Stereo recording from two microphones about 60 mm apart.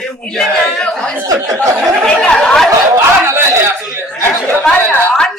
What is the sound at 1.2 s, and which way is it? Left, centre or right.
Speech, right.